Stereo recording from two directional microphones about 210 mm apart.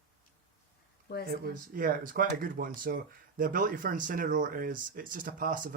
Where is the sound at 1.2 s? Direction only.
45° right (ahead or behind).